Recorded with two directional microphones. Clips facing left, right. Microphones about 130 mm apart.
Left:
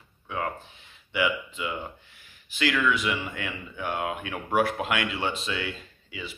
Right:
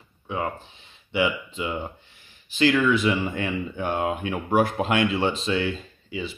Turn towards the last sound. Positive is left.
turn(degrees=-30)  # may be behind; listen again after turning